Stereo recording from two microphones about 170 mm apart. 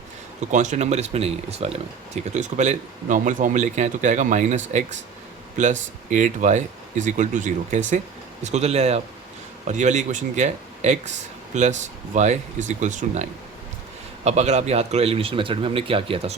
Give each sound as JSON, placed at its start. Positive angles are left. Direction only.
{"t": 0.5, "sound": "speech", "side_deg": -45}
{"t": 14.3, "sound": "speech", "side_deg": -40}